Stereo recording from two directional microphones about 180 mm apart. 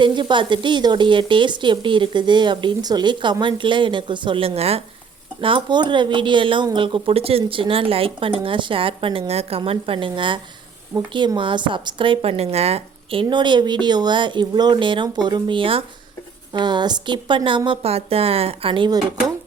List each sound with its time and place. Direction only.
0.0 s speech: 25° right (ahead or behind)